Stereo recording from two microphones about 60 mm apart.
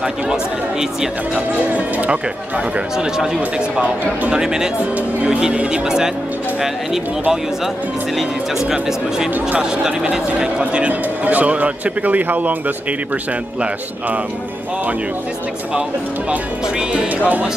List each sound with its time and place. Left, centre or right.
0.0 s speech: centre
1.7 s a man's voice: right
10.7 s a man's voice: right
16.3 s a man's voice: centre